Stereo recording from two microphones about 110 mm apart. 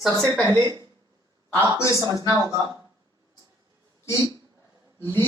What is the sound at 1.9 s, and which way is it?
Speech, 30° right (ahead or behind).